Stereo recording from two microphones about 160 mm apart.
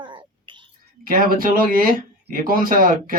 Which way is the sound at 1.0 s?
60° right (ahead or behind).